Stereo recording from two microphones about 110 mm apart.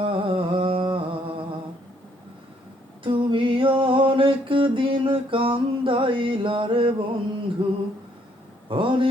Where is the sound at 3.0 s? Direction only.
50° right (ahead or behind).